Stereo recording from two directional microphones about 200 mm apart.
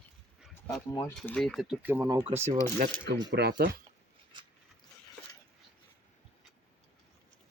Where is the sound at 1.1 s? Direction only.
5° left (ahead or behind); by 2.6 s 15° right (ahead or behind).